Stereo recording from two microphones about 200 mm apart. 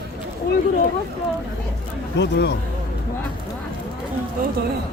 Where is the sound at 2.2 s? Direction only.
60° left (ahead or behind).